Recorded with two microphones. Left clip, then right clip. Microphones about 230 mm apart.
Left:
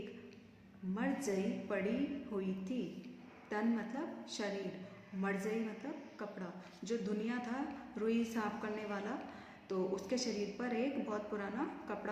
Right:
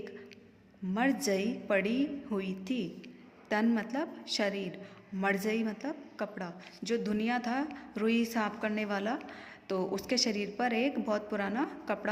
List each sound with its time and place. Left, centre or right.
0.9 s a woman's voice: right